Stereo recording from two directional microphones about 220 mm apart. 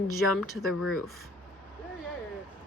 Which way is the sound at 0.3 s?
Centre (ahead or behind).